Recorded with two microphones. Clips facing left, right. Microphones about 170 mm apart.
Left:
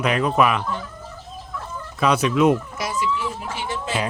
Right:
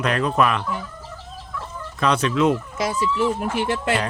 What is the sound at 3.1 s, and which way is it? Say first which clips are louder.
Speech: right 7 dB; 55° right (ahead or behind).